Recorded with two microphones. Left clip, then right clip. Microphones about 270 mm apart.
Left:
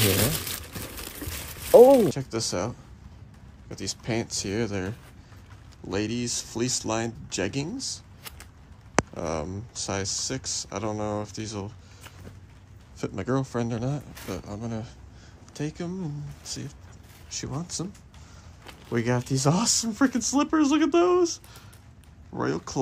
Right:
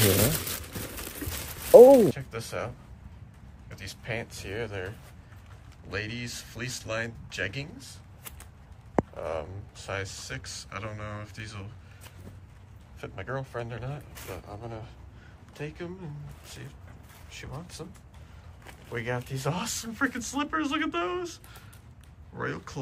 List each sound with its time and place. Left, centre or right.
0.3 s a sound: centre
2.0 s speech: centre
3.7 s speech: centre
5.9 s speech: centre
9.2 s speech: left
13.0 s speech: left
17.3 s speech: left
18.9 s speech: left
22.4 s speech: centre